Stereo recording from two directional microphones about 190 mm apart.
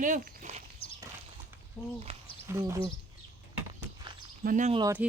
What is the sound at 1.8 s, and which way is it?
Speech, 5° left (ahead or behind).